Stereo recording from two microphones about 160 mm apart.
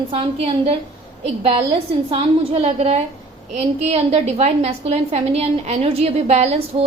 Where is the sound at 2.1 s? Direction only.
35° right (ahead or behind).